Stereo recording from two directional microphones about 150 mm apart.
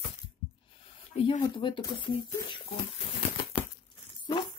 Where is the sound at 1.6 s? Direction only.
35° left (ahead or behind).